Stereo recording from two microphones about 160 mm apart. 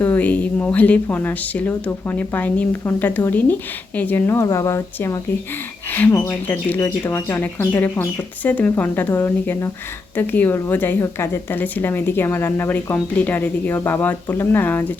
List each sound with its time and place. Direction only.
0.0 s speech: 10° left (ahead or behind)